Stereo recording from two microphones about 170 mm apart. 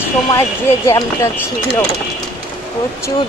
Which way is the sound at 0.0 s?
15° left (ahead or behind).